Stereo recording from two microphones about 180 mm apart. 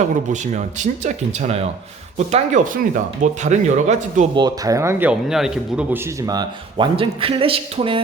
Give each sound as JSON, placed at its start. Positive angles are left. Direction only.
{"t": 0.5, "sound": "speech", "side_deg": -40}
{"t": 4.4, "sound": "speech", "side_deg": -20}